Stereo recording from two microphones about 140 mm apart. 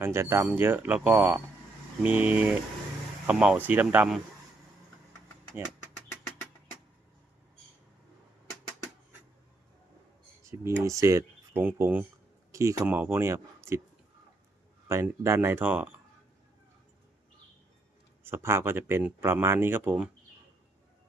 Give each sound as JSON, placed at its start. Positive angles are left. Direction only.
{"t": 0.0, "sound": "speech", "side_deg": -20}
{"t": 10.4, "sound": "speech", "side_deg": -20}
{"t": 14.8, "sound": "speech", "side_deg": -20}
{"t": 18.2, "sound": "speech", "side_deg": -15}